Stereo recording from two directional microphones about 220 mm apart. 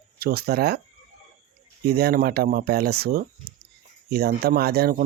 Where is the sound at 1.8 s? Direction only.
45° right (ahead or behind).